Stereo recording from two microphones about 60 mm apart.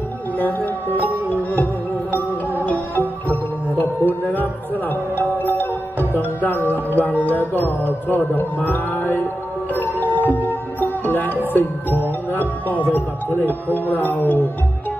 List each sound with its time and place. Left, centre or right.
0.4 s music: left
2.6 s music: left
13.5 s speech: left